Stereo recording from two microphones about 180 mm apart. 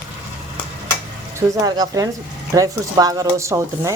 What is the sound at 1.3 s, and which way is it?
A woman's voice, 20° right (ahead or behind).